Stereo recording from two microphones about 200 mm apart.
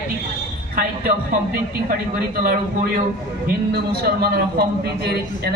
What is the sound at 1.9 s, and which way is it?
A man's voice, 50° right (ahead or behind).